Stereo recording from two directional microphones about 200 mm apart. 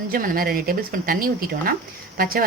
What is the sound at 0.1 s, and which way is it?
A woman's voice, 45° right (ahead or behind).